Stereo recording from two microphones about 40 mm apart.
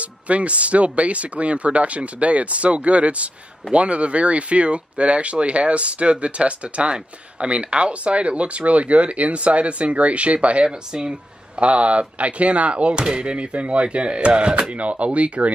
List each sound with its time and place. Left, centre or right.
0.0 s speech: right
10.9 s speech: right